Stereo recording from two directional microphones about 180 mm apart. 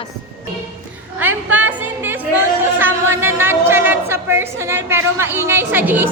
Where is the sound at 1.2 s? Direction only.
10° right (ahead or behind).